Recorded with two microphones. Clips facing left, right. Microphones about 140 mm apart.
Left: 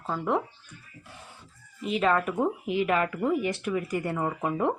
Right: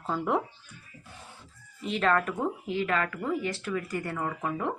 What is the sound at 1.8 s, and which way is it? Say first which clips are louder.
Speech: left 1 dB; 5° left (ahead or behind).